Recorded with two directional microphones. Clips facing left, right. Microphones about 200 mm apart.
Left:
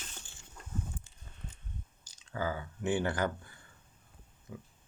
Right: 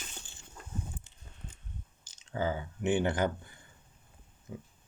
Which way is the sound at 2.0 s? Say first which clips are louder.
Right 3 dB; 25° right (ahead or behind).